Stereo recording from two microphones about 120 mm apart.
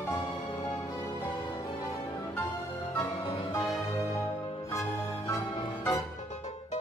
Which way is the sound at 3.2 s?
45° left (ahead or behind).